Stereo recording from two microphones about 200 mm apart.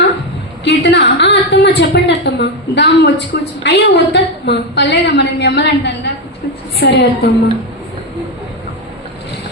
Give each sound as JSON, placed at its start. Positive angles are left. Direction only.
{"t": 0.6, "sound": "a woman's voice", "side_deg": 65}